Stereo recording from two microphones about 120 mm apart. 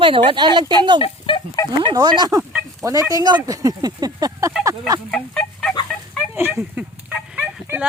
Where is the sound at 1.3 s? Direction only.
45° left (ahead or behind).